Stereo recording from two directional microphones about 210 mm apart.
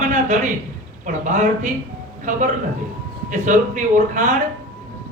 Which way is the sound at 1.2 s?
35° right (ahead or behind).